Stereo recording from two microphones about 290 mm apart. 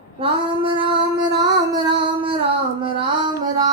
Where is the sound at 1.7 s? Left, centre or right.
Centre.